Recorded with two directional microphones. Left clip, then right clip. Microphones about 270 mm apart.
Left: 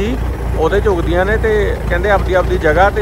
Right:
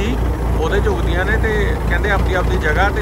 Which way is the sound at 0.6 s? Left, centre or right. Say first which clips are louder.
Left 6 dB; centre.